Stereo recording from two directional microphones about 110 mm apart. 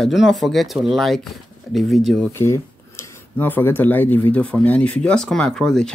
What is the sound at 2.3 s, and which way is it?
Speech, 25° left (ahead or behind).